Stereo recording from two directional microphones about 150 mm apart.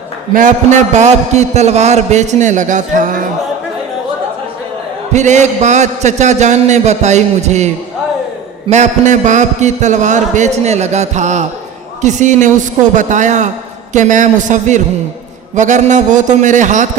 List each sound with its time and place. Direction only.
0.3 s a man's voice: 55° right (ahead or behind)
5.1 s a man's voice: 50° right (ahead or behind)
8.7 s a man's voice: 50° right (ahead or behind)